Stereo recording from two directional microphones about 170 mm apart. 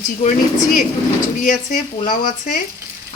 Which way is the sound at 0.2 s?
50° left (ahead or behind).